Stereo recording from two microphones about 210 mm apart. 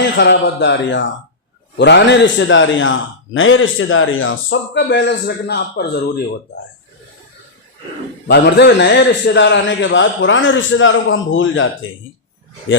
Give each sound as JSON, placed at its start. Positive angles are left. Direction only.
{"t": 0.2, "sound": "a man's voice", "side_deg": 55}
{"t": 8.3, "sound": "a man's voice", "side_deg": 55}